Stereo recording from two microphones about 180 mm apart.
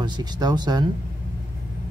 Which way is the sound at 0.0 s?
20° right (ahead or behind).